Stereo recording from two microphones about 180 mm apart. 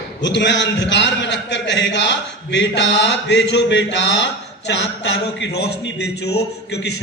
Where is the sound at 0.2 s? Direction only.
80° left.